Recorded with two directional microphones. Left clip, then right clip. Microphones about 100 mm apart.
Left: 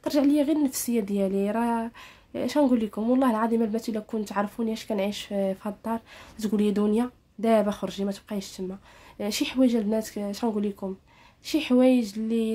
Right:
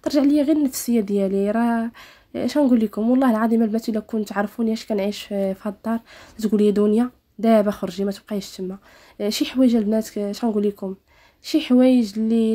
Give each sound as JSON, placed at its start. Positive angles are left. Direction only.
{"t": 0.0, "sound": "speech", "side_deg": -30}